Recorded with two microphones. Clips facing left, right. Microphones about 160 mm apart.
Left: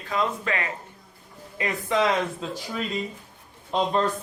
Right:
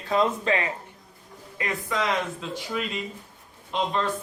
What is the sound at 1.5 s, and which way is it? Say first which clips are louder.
Speech: left 4 dB; 25° left (ahead or behind).